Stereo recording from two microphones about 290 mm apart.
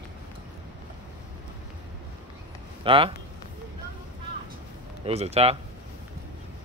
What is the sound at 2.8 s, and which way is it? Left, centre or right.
Speech, centre.